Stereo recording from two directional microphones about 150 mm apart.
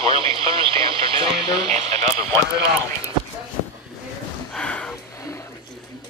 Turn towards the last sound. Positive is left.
turn(degrees=5)  # may be behind; listen again after turning